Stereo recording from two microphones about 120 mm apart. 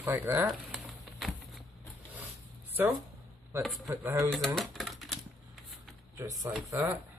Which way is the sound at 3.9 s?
20° right (ahead or behind).